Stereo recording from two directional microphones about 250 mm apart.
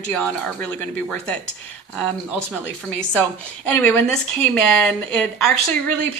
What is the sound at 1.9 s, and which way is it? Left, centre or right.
Speech, centre.